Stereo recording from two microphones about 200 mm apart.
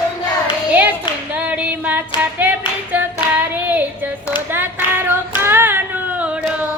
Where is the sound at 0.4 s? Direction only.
5° right (ahead or behind).